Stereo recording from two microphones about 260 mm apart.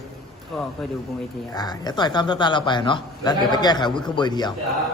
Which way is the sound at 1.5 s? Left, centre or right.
Centre.